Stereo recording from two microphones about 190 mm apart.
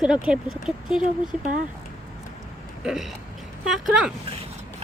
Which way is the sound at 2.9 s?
Centre (ahead or behind).